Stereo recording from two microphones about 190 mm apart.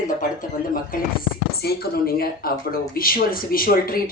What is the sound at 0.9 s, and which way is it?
Speech, 50° left (ahead or behind).